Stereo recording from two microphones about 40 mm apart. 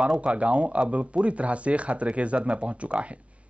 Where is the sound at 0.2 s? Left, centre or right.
Right.